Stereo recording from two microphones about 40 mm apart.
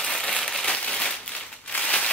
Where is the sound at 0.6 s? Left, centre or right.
Left.